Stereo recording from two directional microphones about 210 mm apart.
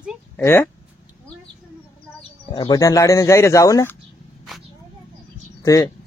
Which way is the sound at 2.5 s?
20° left (ahead or behind).